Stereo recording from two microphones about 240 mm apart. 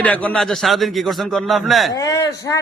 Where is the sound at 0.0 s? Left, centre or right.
Centre.